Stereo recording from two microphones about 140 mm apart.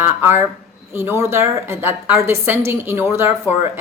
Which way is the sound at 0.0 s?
15° right (ahead or behind).